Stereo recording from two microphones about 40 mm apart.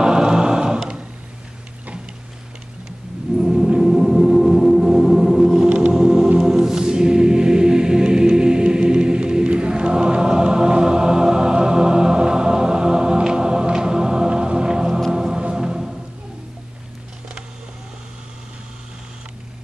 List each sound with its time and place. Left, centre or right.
0.0 s a sound: centre
3.3 s gong: centre
5.8 s choir: right
15.0 s music: centre